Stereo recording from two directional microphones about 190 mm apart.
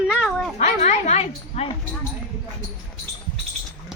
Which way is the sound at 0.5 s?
40° left (ahead or behind).